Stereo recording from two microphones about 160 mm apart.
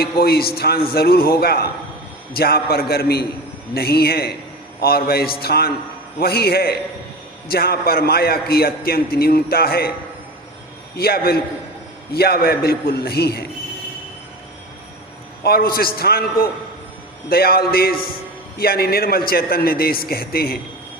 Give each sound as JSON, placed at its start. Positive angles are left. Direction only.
{"t": 0.0, "sound": "a man's voice", "side_deg": 75}
{"t": 10.9, "sound": "a man's voice", "side_deg": 75}
{"t": 15.4, "sound": "a man's voice", "side_deg": 70}